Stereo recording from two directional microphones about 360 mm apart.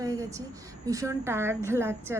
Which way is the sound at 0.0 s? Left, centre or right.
Centre.